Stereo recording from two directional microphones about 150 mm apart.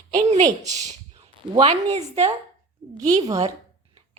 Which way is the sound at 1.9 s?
45° right (ahead or behind).